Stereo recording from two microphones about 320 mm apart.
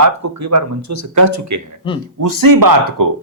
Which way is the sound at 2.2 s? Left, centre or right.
Right.